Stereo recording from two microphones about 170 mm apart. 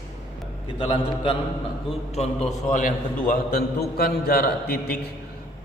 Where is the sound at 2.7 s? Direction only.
50° left (ahead or behind).